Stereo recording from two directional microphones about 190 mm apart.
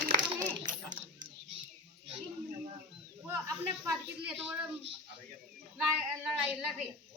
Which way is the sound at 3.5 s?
5° right (ahead or behind).